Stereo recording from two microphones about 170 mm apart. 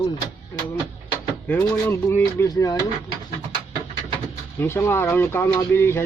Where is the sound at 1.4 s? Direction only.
15° left (ahead or behind).